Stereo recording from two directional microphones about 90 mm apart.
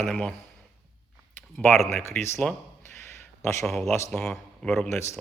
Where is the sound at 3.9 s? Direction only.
30° left (ahead or behind).